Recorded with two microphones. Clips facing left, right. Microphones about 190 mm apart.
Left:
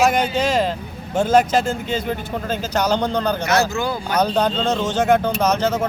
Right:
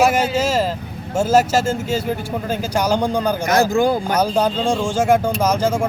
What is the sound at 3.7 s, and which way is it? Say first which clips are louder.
Speech: right 7 dB; 50° right (ahead or behind).